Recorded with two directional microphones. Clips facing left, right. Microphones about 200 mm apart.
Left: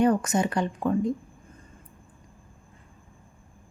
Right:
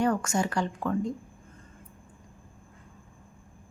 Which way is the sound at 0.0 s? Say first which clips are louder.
Left 4 dB; 20° left (ahead or behind).